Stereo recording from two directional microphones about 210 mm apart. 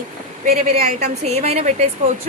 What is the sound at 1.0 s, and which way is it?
Speech, 30° right (ahead or behind).